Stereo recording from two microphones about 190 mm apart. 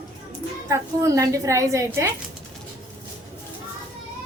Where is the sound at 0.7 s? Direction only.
15° right (ahead or behind).